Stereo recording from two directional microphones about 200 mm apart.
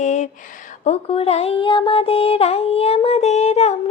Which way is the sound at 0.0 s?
35° left (ahead or behind).